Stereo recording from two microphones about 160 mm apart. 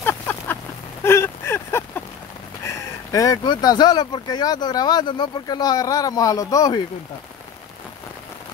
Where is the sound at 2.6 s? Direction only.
20° left (ahead or behind).